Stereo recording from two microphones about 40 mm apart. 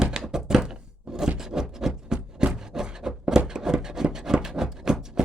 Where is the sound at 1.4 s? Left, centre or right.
Centre.